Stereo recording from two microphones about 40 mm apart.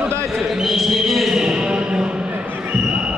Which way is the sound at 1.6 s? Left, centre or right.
Right.